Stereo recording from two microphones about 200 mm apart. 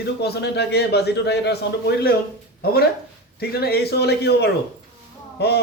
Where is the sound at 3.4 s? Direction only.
50° left (ahead or behind).